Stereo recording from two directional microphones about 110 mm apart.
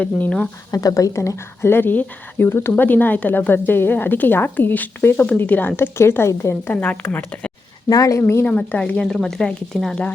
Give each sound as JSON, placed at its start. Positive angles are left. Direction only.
{"t": 0.0, "sound": "a woman's voice", "side_deg": 10}
{"t": 0.7, "sound": "a woman's voice", "side_deg": 35}
{"t": 7.9, "sound": "speech", "side_deg": 30}
{"t": 8.2, "sound": "a woman's voice", "side_deg": 20}